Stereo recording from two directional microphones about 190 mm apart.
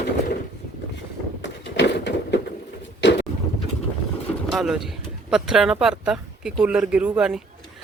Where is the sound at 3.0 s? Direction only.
65° left (ahead or behind).